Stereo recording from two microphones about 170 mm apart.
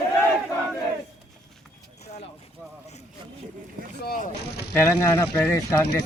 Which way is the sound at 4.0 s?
60° left (ahead or behind).